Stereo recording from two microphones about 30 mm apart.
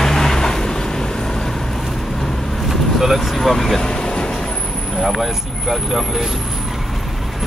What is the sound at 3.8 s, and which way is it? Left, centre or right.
Vehicle, left.